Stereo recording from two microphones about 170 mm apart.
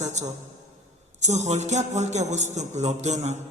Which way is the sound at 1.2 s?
40° right (ahead or behind).